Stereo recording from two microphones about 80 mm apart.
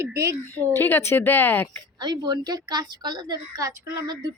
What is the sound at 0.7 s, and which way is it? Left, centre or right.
Speech, left.